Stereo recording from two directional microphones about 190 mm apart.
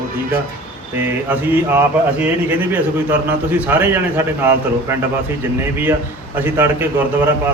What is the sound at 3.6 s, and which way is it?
Speech, 10° right (ahead or behind).